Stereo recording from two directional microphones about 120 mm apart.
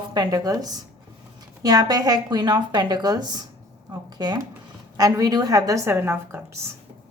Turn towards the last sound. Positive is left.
turn(degrees=-20)  # may be behind; listen again after turning